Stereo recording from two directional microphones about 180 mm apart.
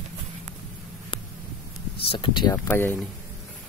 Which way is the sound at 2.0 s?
25° left (ahead or behind).